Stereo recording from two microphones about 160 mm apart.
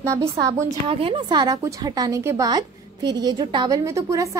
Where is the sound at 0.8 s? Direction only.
35° right (ahead or behind).